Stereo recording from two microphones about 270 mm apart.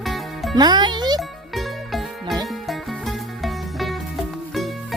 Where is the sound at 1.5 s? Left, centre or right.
Centre.